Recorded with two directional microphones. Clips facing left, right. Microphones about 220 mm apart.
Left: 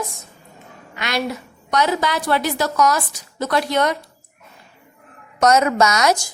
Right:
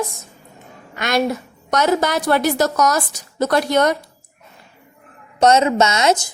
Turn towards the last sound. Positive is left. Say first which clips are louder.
# right 1 dB
turn(degrees=-25)  # may be behind; listen again after turning